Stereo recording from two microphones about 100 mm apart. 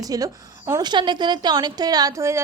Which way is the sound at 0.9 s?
50° right (ahead or behind).